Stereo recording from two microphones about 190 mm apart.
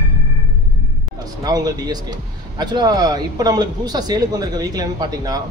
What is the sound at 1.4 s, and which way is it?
A man's voice, 20° right (ahead or behind).